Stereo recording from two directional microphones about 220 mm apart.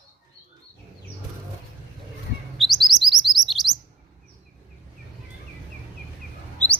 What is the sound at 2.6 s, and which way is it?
Chirp, centre (ahead or behind).